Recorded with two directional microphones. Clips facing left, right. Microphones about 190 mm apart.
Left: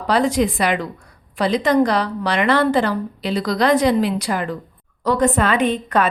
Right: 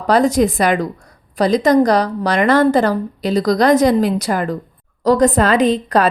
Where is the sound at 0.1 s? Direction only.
45° right (ahead or behind).